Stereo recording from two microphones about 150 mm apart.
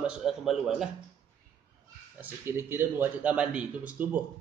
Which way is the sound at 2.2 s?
15° right (ahead or behind).